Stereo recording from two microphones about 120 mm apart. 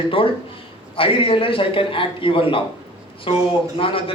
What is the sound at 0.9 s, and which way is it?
A man's voice, 50° left (ahead or behind).